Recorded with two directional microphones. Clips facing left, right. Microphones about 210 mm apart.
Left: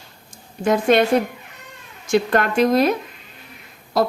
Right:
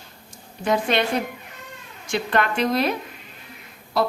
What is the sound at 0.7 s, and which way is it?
Speech, 45° left (ahead or behind).